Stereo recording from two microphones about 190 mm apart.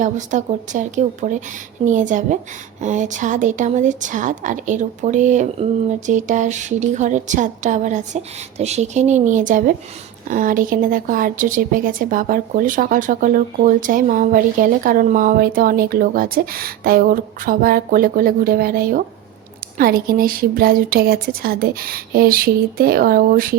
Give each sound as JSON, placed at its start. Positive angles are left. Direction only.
{"t": 0.0, "sound": "a woman's voice", "side_deg": -40}